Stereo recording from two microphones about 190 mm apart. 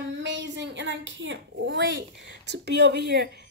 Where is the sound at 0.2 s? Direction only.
70° right (ahead or behind).